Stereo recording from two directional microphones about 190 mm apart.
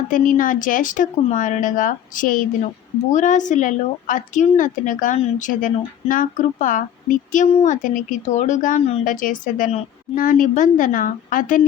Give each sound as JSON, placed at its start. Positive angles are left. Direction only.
{"t": 0.1, "sound": "a woman's voice", "side_deg": 45}
{"t": 9.2, "sound": "speech", "side_deg": 45}